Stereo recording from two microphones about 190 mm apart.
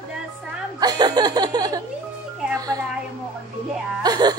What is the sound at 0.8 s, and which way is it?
Chuckle, 20° right (ahead or behind).